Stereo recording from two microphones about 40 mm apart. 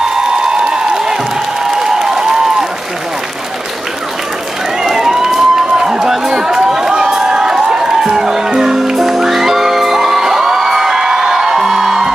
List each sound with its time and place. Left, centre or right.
1.8 s a sound: centre
4.8 s run: centre
6.8 s music: centre